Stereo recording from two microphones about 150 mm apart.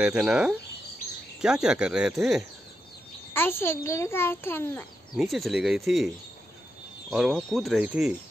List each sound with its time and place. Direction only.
0.0 s speech: 5° right (ahead or behind)
3.3 s a child's voice: 15° left (ahead or behind)
5.1 s speech: centre (ahead or behind)